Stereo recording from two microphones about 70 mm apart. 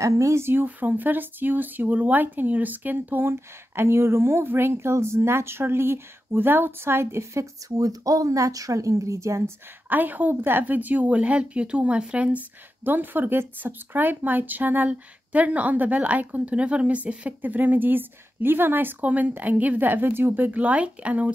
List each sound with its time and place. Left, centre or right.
0.0 s speech: right
7.7 s speech: right
9.8 s speech: right
12.8 s speech: right